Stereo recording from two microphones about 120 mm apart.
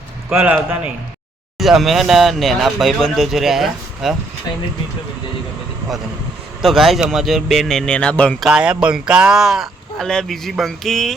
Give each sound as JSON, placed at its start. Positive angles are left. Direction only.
{"t": 0.3, "sound": "a man's voice", "side_deg": -15}
{"t": 1.5, "sound": "speech", "side_deg": 0}
{"t": 6.6, "sound": "speech", "side_deg": 0}
{"t": 8.4, "sound": "speech", "side_deg": -10}